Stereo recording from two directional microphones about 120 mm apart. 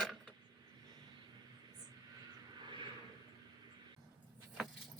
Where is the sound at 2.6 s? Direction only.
40° right (ahead or behind).